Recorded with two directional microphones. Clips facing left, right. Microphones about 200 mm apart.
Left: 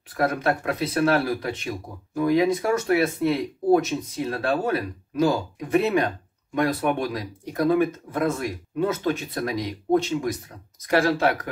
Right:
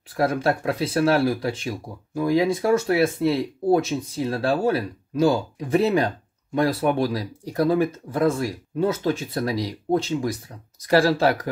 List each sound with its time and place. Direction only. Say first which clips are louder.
0.1 s speech: right 2 dB; 30° right (ahead or behind)